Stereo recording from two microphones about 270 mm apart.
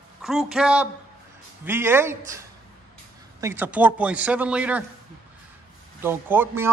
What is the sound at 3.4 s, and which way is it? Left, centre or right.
A man's voice, centre.